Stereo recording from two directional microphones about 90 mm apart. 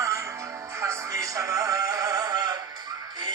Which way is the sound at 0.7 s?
35° right (ahead or behind).